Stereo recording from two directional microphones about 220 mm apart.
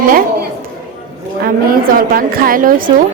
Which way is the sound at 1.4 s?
40° right (ahead or behind).